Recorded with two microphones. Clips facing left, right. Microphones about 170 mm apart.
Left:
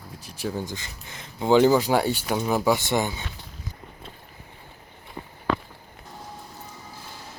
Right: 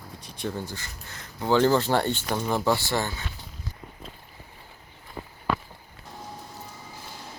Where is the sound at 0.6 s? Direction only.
15° left (ahead or behind).